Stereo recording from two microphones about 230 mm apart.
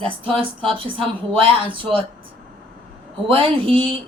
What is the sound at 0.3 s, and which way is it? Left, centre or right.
Speech, right.